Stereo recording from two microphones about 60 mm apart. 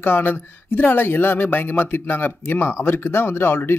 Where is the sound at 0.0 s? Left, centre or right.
Left.